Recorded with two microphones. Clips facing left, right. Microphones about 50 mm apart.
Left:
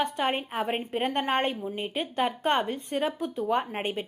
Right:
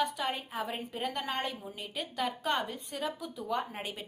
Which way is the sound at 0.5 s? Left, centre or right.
Left.